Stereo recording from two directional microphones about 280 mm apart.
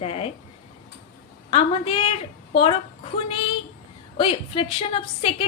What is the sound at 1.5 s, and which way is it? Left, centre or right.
Speech, centre.